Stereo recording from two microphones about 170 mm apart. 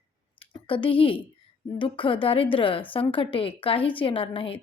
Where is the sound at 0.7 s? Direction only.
30° left (ahead or behind).